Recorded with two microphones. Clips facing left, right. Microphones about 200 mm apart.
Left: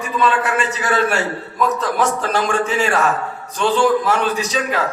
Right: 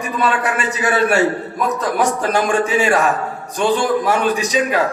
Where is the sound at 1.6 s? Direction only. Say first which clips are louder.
Even; 15° right (ahead or behind).